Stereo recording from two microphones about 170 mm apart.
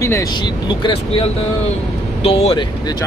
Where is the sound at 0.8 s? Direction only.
30° left (ahead or behind).